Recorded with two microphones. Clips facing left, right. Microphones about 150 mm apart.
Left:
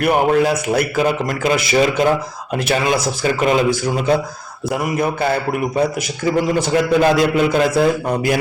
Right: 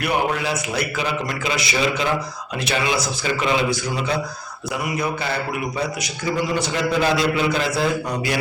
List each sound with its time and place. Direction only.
0.0 s a man's voice: 50° left (ahead or behind)
7.0 s a man's voice: 50° left (ahead or behind)